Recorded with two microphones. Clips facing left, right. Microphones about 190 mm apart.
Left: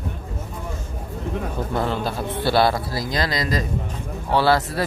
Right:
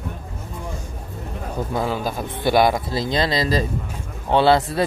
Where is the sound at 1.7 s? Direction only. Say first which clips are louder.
Right 1 dB; 10° right (ahead or behind).